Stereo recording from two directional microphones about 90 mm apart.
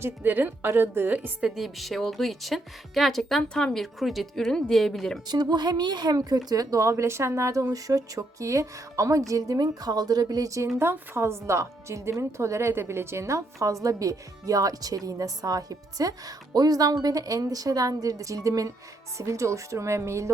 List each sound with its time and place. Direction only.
0.0 s a woman's voice: 20° right (ahead or behind)
1.5 s speech: 5° right (ahead or behind)
5.3 s a woman's voice: 50° right (ahead or behind)
10.8 s a woman's voice: 30° right (ahead or behind)